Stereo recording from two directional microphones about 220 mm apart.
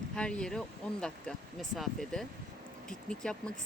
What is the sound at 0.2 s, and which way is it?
Speech, 5° left (ahead or behind).